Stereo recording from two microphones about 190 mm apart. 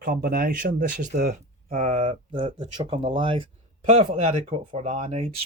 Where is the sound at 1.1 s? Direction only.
55° right (ahead or behind).